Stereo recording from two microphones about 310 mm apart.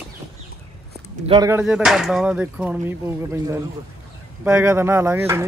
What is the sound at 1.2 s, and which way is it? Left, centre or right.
Speech, centre.